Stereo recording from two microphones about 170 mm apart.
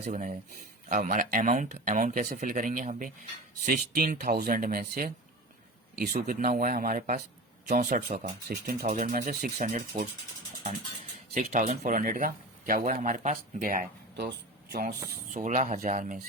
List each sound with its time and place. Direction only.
0.0 s speech: 45° right (ahead or behind)
11.3 s speech: 45° right (ahead or behind)
14.7 s speech: 70° right (ahead or behind)
15.3 s speech: 50° right (ahead or behind)